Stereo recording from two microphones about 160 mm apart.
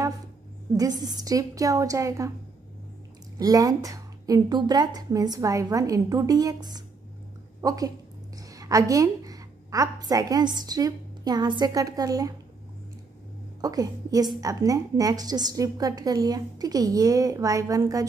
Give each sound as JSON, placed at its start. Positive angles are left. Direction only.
{"t": 0.7, "sound": "a woman's voice", "side_deg": -25}
{"t": 3.3, "sound": "a woman's voice", "side_deg": -20}
{"t": 13.6, "sound": "a woman's voice", "side_deg": -25}